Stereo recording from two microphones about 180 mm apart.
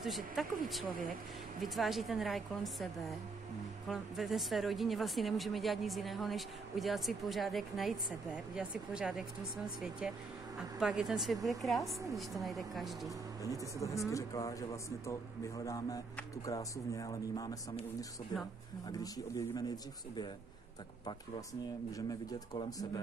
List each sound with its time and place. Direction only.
0.0 s a woman's voice: centre (ahead or behind)
13.4 s speech: 20° left (ahead or behind)
18.9 s speech: 20° left (ahead or behind)
22.5 s speech: 25° left (ahead or behind)